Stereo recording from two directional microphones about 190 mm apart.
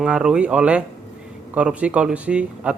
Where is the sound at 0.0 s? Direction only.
5° right (ahead or behind).